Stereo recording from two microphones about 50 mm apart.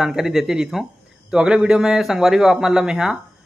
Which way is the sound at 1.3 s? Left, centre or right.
Right.